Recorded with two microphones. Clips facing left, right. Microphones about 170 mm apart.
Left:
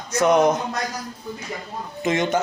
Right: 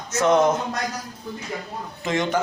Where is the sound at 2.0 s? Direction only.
20° left (ahead or behind).